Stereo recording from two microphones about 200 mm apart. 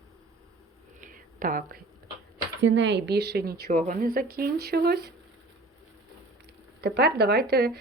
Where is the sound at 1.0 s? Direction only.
45° right (ahead or behind).